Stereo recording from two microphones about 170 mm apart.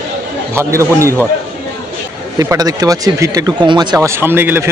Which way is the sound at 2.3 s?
20° right (ahead or behind).